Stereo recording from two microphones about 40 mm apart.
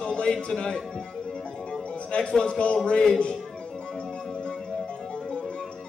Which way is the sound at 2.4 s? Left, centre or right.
Left.